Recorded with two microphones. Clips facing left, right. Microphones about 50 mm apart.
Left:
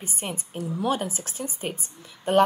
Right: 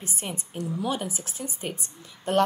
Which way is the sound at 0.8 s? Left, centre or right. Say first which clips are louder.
Left 6 dB; left.